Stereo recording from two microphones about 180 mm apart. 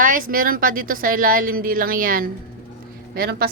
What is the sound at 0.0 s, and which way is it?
Speech, 50° right (ahead or behind).